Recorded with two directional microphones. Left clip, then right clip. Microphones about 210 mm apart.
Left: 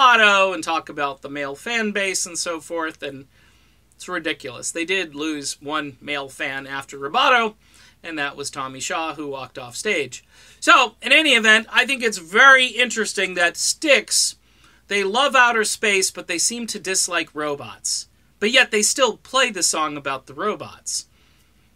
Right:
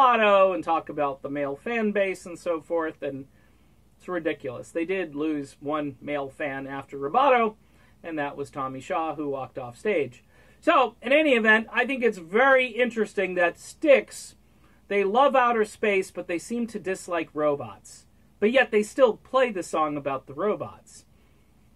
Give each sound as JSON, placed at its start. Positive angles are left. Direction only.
{"t": 0.0, "sound": "speech", "side_deg": 15}